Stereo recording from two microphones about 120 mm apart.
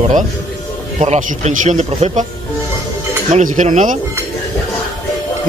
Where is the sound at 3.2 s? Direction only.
90° right.